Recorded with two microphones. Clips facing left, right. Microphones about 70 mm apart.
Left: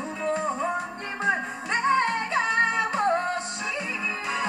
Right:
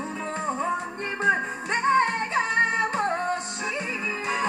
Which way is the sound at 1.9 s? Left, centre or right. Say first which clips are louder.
Right 3 dB; right.